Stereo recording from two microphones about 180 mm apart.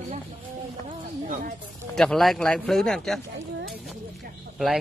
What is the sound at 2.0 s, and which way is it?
Speech, centre (ahead or behind).